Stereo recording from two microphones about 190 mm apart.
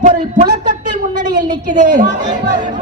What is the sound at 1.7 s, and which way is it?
Speech, 40° right (ahead or behind).